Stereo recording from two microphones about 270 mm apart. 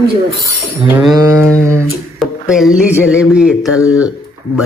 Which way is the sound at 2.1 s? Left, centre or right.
Centre.